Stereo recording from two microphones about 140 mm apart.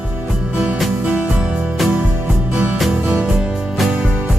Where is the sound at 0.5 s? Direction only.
10° right (ahead or behind).